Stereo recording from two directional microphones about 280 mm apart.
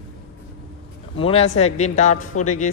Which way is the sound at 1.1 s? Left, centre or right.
Centre.